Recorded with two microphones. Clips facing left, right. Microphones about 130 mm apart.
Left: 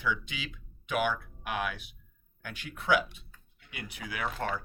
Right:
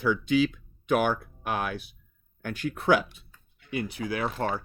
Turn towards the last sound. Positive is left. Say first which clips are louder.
# right 5 dB
turn(degrees=-35)  # may be behind; listen again after turning